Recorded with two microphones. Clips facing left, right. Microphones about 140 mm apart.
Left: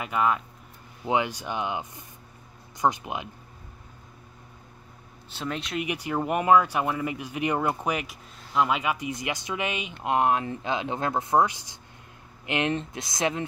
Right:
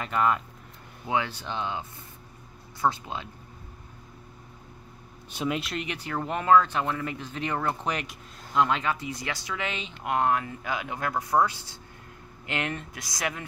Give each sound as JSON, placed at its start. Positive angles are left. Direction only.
{"t": 0.0, "sound": "speech", "side_deg": 5}
{"t": 1.0, "sound": "speech", "side_deg": 15}
{"t": 5.3, "sound": "speech", "side_deg": -10}
{"t": 5.8, "sound": "speech", "side_deg": 15}